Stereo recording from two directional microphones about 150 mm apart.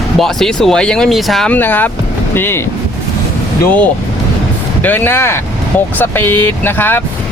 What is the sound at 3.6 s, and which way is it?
Speech, 10° left (ahead or behind).